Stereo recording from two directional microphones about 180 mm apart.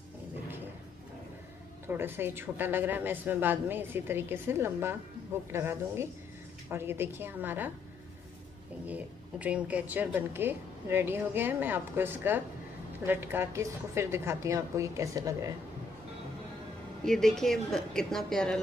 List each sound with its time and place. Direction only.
1.9 s speech: 10° right (ahead or behind)
8.8 s speech: 10° right (ahead or behind)
17.0 s a woman's voice: 5° left (ahead or behind)